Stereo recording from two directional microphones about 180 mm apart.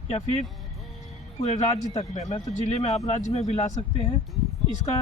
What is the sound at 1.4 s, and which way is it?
Speech, 35° left (ahead or behind).